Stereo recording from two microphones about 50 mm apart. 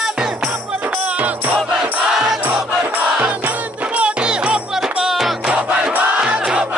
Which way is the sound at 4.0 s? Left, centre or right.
Right.